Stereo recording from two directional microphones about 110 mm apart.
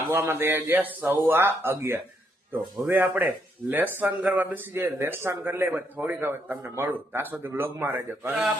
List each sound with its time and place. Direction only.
0.1 s a man's voice: 20° right (ahead or behind)